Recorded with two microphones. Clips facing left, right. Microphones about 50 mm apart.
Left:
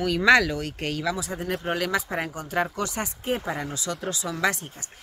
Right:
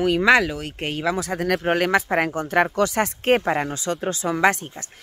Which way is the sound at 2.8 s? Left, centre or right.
Right.